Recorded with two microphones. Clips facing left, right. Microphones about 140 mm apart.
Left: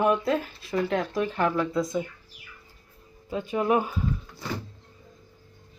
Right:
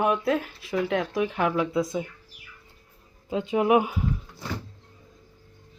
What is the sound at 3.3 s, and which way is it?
Speech, 20° right (ahead or behind).